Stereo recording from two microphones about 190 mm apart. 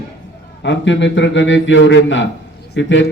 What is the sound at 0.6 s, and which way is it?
Speech, 70° left (ahead or behind).